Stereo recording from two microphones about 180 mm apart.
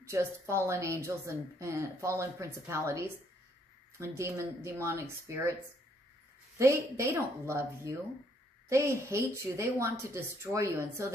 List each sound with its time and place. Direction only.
0.1 s a woman's voice: 15° right (ahead or behind)
6.6 s a woman's voice: 15° right (ahead or behind)